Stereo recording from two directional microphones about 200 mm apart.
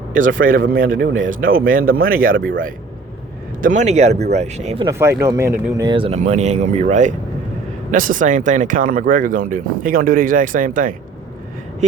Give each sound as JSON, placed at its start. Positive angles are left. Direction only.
{"t": 0.4, "sound": "speech", "side_deg": -45}
{"t": 0.9, "sound": "speech", "side_deg": -65}
{"t": 1.3, "sound": "speech", "side_deg": -45}
{"t": 4.9, "sound": "speech", "side_deg": -15}